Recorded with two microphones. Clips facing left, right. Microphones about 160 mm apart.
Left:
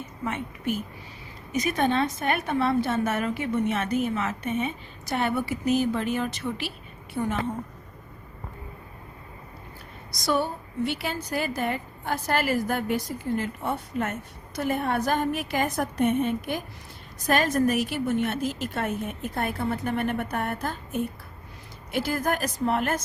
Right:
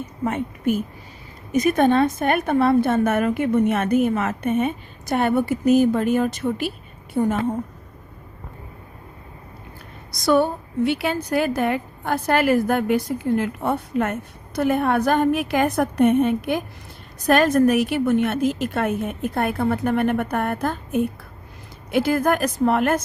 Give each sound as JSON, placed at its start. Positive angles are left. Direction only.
{"t": 0.0, "sound": "a woman's voice", "side_deg": -45}
{"t": 10.2, "sound": "a woman's voice", "side_deg": -55}
{"t": 21.9, "sound": "a woman's voice", "side_deg": -55}